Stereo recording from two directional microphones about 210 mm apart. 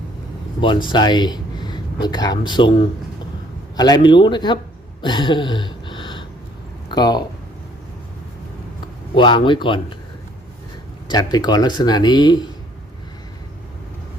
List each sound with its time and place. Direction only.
0.6 s speech: 20° left (ahead or behind)
3.8 s speech: 20° left (ahead or behind)
5.0 s a sound: 20° left (ahead or behind)
6.8 s speech: 20° left (ahead or behind)
9.1 s speech: 25° left (ahead or behind)
11.1 s speech: 20° left (ahead or behind)